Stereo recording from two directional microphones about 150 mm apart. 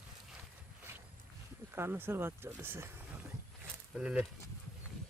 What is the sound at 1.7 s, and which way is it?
Speech, 15° right (ahead or behind).